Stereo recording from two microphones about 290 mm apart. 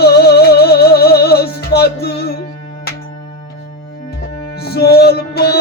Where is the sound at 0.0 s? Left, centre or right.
Left.